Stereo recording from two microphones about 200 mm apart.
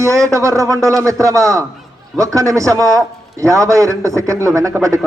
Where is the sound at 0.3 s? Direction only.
15° right (ahead or behind).